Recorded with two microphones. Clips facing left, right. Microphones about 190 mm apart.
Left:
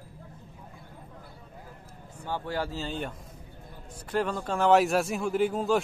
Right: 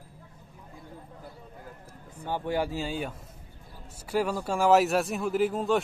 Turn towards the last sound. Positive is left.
turn(degrees=0)  # may be behind; listen again after turning